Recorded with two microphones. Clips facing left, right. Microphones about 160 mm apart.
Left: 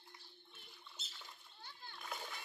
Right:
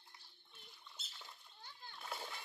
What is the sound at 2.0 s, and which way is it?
Splash, 30° right (ahead or behind).